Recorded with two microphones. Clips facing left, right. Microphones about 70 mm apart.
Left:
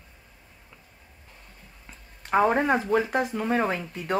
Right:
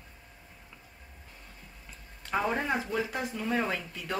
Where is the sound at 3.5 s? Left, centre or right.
Left.